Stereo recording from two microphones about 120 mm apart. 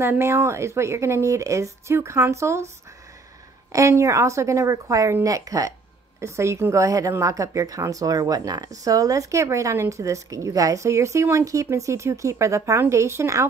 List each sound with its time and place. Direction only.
0.0 s a woman's voice: 20° right (ahead or behind)
3.7 s a woman's voice: 25° right (ahead or behind)